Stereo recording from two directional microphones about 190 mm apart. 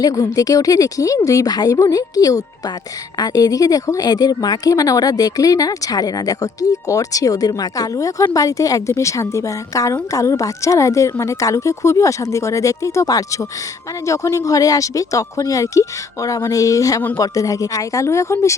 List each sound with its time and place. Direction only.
0.0 s speech: 20° left (ahead or behind)